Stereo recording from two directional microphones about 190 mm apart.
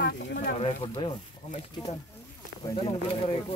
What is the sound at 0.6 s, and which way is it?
Speech, 30° left (ahead or behind).